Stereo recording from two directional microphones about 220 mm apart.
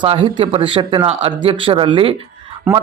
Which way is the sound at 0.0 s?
25° right (ahead or behind).